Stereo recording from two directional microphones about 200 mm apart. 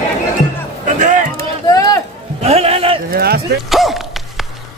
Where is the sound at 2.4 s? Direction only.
30° right (ahead or behind).